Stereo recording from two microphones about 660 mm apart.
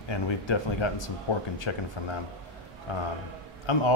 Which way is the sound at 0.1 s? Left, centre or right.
Left.